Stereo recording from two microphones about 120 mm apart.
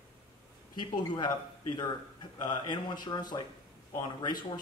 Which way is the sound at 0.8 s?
40° left (ahead or behind).